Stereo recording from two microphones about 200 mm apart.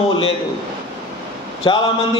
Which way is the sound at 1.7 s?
25° left (ahead or behind).